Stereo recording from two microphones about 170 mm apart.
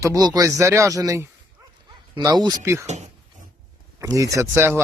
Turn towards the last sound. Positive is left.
turn(degrees=-15)  # may be behind; listen again after turning